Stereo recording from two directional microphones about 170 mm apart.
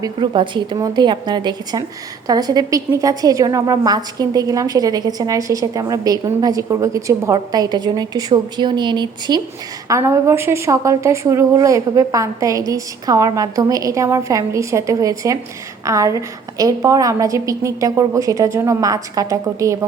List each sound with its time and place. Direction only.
0.0 s a woman's voice: 30° right (ahead or behind)